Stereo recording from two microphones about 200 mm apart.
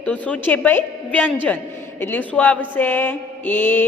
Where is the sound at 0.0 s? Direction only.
5° left (ahead or behind).